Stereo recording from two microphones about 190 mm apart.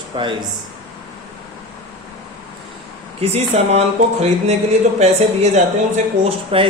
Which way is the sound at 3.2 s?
35° right (ahead or behind).